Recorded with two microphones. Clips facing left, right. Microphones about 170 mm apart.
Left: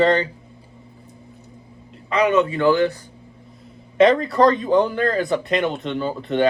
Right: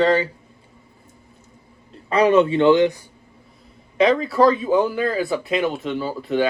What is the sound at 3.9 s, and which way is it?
Speech, centre (ahead or behind).